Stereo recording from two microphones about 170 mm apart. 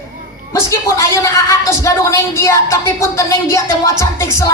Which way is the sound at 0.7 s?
15° left (ahead or behind).